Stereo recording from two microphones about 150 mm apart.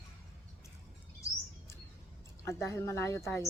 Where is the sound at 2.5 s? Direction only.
20° left (ahead or behind).